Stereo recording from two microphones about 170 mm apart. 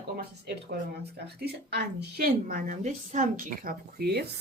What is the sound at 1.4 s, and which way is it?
A woman's voice, 75° right (ahead or behind).